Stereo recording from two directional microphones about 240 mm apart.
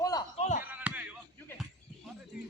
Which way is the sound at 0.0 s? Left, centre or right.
Centre.